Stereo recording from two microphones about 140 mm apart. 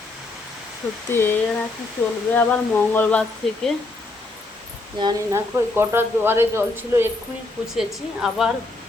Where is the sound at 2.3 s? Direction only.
10° left (ahead or behind).